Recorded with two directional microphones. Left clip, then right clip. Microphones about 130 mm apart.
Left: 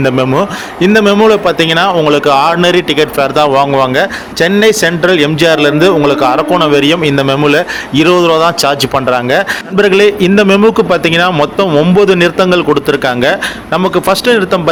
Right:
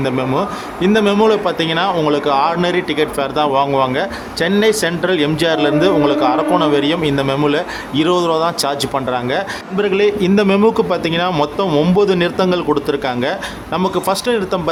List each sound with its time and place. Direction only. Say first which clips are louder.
0.0 s a man's voice: left 7 dB; 35° left (ahead or behind)